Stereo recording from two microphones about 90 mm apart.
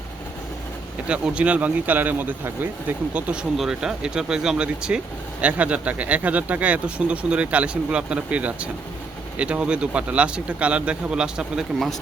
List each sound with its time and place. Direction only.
1.0 s speech: 10° right (ahead or behind)